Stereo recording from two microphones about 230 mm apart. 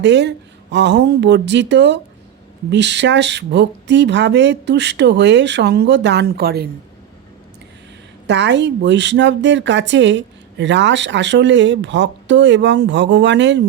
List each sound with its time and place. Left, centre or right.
0.0 s a woman's voice: right
8.3 s a woman's voice: right